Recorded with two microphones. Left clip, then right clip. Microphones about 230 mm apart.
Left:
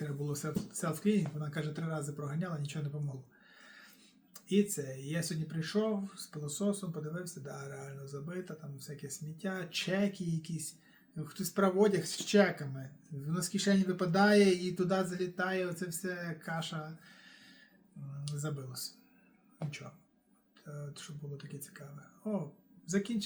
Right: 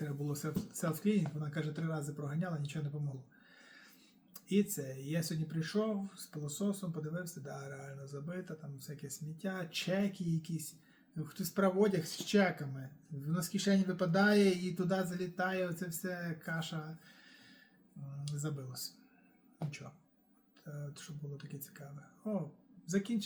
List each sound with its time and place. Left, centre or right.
0.0 s speech: centre
4.4 s speech: centre
20.7 s speech: centre